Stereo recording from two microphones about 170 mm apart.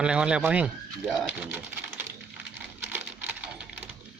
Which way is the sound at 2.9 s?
10° right (ahead or behind).